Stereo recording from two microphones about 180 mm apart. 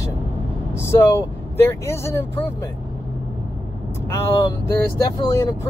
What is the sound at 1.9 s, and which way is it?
Speech, 15° left (ahead or behind).